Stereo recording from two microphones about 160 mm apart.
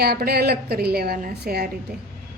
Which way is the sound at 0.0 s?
80° right.